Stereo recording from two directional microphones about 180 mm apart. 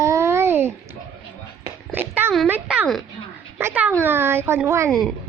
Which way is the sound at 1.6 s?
10° right (ahead or behind).